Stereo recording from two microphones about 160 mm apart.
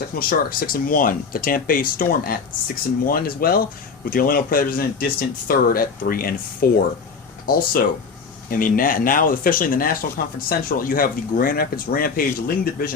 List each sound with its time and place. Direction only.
0.2 s speech: 65° left (ahead or behind)